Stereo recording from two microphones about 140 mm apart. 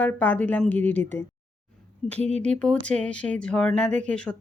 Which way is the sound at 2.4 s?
5° left (ahead or behind).